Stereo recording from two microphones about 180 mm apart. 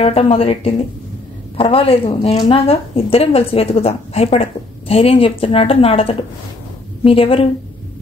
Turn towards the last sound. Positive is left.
turn(degrees=30)  # may be behind; listen again after turning